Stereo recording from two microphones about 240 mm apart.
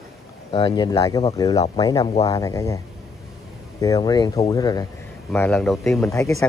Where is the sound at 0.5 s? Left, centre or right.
Left.